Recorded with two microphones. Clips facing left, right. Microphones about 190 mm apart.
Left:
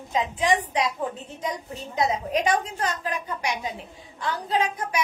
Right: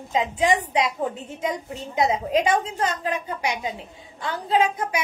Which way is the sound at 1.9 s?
25° right (ahead or behind).